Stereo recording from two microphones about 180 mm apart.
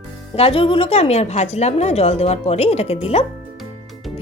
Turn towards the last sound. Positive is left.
turn(degrees=35)  # may be behind; listen again after turning